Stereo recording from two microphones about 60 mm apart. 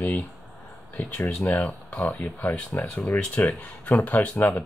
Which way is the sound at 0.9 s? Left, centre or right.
Left.